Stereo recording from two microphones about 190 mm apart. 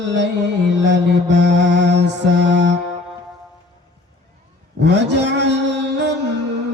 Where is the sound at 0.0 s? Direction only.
70° right (ahead or behind).